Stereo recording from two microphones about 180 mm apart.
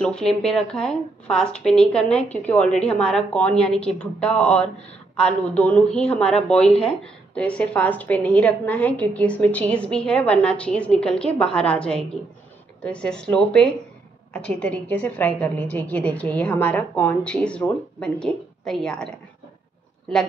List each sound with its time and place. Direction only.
0.0 s a woman's voice: 5° left (ahead or behind)
6.3 s speech: 35° left (ahead or behind)
6.8 s a woman's voice: 5° left (ahead or behind)